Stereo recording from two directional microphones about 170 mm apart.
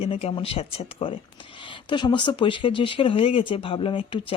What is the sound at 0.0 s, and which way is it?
Speech, 35° left (ahead or behind).